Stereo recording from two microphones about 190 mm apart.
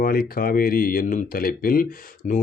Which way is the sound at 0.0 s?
50° left (ahead or behind).